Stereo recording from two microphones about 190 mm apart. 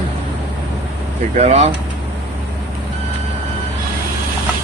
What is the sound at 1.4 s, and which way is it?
Speech, 35° right (ahead or behind).